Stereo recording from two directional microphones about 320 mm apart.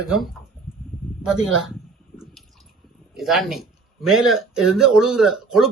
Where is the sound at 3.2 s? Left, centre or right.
Centre.